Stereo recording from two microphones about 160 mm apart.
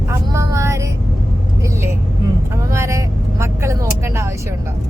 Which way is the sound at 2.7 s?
15° right (ahead or behind).